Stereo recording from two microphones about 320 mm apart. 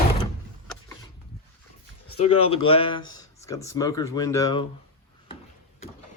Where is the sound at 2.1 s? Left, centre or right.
Centre.